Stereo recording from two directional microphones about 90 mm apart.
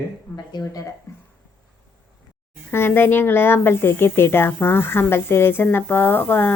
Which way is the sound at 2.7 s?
25° left (ahead or behind).